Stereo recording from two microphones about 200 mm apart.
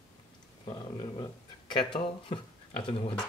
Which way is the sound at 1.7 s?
25° left (ahead or behind).